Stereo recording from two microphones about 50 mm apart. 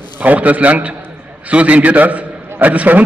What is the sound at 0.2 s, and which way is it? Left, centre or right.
A man's voice, right.